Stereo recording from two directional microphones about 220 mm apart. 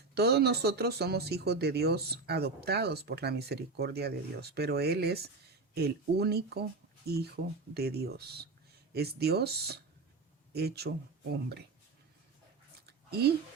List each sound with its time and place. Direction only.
0.1 s speech: 45° right (ahead or behind)
7.7 s speech: 45° right (ahead or behind)
12.8 s a sound: 45° right (ahead or behind)